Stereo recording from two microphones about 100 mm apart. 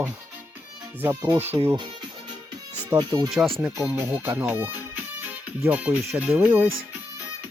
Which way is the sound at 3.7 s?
35° right (ahead or behind).